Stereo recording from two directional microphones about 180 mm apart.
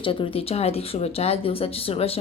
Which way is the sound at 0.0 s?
30° left (ahead or behind).